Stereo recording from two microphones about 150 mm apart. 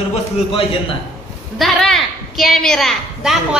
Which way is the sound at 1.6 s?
Centre (ahead or behind).